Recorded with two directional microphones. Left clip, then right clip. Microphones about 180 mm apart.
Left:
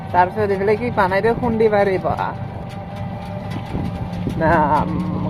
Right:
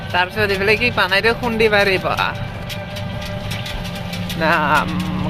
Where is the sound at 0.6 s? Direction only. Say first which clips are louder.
Right 2 dB; 10° right (ahead or behind).